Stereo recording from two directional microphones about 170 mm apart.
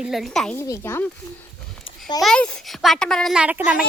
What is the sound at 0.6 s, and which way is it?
Speech, 15° left (ahead or behind).